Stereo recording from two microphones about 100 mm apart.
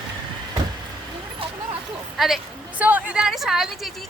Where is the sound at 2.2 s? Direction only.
Centre (ahead or behind).